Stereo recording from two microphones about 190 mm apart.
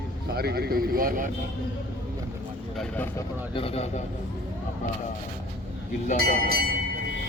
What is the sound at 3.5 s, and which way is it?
Speech, 30° left (ahead or behind).